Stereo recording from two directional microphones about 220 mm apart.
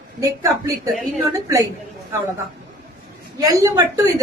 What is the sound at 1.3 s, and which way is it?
Speech, 15° right (ahead or behind).